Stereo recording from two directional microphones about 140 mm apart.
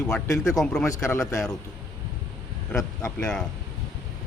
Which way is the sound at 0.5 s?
5° left (ahead or behind).